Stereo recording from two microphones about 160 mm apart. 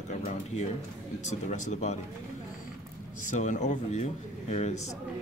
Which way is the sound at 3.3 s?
50° left (ahead or behind).